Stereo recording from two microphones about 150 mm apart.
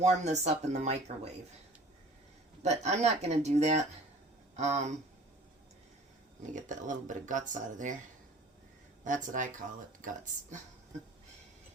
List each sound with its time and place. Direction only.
0.0 s speech: 50° right (ahead or behind)
2.6 s speech: 50° right (ahead or behind)
6.4 s speech: 55° right (ahead or behind)
9.0 s speech: 55° right (ahead or behind)